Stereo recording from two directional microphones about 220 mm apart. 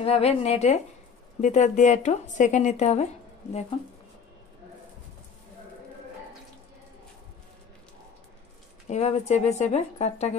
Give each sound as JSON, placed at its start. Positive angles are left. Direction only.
{"t": 0.0, "sound": "speech", "side_deg": 25}
{"t": 8.8, "sound": "speech", "side_deg": 30}